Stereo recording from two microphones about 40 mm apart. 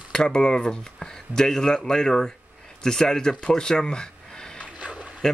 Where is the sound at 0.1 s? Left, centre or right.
Centre.